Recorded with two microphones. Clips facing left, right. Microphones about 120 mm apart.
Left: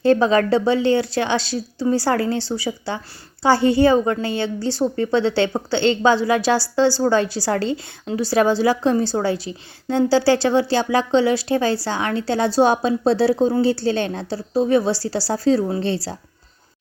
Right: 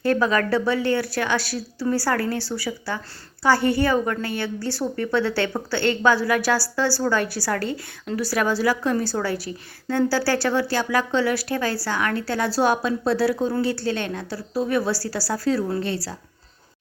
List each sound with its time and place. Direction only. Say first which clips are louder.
0.0 s a woman's voice: left 5 dB; 25° left (ahead or behind)